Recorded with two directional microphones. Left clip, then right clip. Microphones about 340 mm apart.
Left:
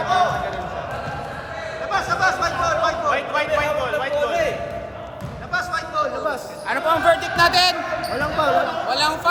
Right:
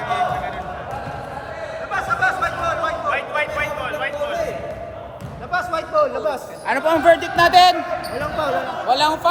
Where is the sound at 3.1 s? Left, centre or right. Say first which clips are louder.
Left 1 dB; centre.